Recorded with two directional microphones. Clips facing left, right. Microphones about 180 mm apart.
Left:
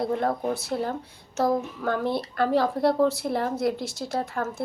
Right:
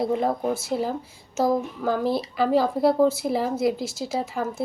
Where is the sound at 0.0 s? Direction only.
Centre (ahead or behind).